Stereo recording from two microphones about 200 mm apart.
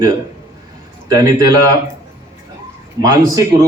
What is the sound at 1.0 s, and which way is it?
Speech, 20° right (ahead or behind).